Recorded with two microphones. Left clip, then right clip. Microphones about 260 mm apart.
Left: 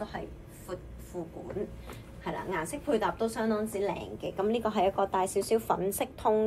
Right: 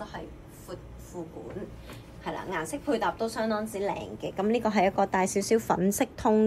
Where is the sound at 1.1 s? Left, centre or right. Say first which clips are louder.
Left 2 dB; centre.